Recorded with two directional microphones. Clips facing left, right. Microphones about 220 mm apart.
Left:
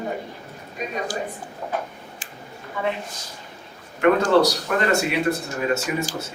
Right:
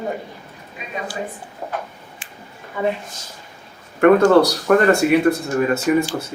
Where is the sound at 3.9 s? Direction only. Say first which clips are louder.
Right 5 dB; 50° right (ahead or behind).